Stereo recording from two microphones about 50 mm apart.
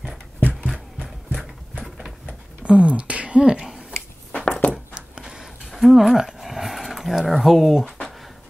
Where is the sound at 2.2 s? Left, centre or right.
Right.